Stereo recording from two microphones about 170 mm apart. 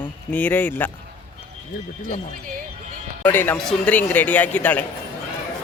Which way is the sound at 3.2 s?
10° left (ahead or behind).